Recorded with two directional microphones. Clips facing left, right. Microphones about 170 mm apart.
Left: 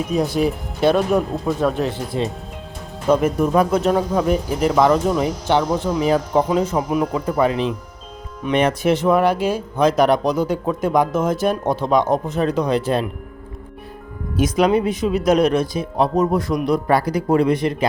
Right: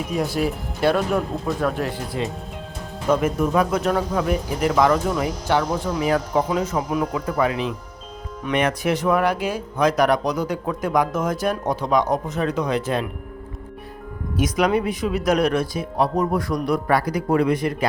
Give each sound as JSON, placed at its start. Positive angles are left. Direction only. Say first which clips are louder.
{"t": 0.3, "sound": "speech", "louder": "left 3 dB", "side_deg": 20}
{"t": 14.4, "sound": "speech", "louder": "left 4 dB", "side_deg": 25}